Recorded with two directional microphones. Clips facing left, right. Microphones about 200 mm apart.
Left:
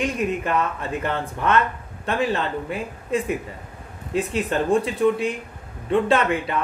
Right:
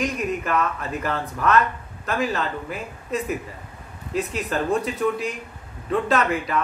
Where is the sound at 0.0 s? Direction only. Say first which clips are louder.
Left 2 dB; 30° left (ahead or behind).